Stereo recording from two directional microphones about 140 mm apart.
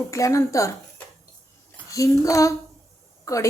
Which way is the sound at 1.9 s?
25° left (ahead or behind).